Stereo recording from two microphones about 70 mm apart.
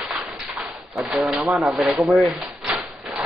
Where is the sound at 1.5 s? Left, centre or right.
Centre.